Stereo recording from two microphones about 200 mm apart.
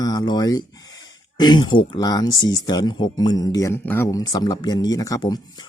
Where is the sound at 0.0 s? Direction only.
20° left (ahead or behind).